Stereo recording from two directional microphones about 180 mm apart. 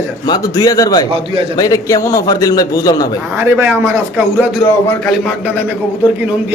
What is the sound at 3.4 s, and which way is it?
Speech, 10° right (ahead or behind).